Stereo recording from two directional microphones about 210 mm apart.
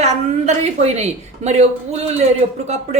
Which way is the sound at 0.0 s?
30° right (ahead or behind).